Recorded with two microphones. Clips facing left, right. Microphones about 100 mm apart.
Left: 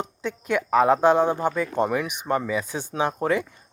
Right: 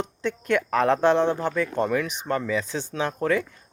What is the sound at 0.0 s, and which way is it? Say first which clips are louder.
Speech: right 2 dB; 5° left (ahead or behind).